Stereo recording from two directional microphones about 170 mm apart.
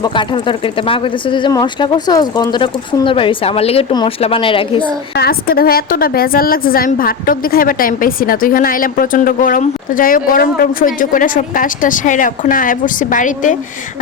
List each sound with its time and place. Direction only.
0.0 s speech: 25° left (ahead or behind)
5.1 s a woman's voice: 65° left (ahead or behind); by 13.6 s 50° left (ahead or behind)